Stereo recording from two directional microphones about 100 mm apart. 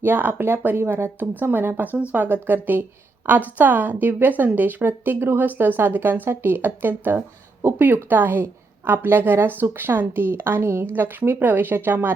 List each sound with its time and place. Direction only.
0.0 s speech: 20° right (ahead or behind)